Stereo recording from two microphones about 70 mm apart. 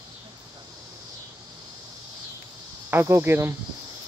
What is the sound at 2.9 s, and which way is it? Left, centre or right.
Speech, right.